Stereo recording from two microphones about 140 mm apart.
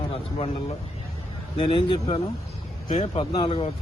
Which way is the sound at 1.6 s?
35° left (ahead or behind).